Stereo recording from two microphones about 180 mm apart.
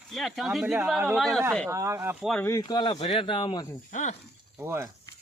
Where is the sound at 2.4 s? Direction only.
15° left (ahead or behind).